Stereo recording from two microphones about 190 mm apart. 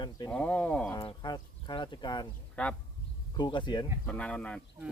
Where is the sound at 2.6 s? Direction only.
5° left (ahead or behind).